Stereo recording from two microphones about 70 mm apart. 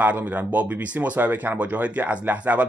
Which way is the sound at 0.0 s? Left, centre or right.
Right.